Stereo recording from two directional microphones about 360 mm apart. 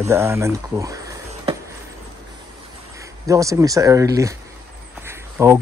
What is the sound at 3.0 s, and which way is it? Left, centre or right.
Speech, centre.